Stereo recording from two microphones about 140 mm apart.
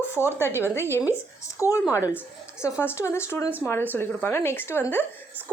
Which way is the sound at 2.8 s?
20° left (ahead or behind).